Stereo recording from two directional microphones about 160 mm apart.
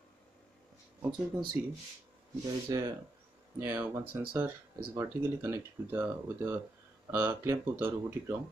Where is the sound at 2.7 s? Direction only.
20° right (ahead or behind).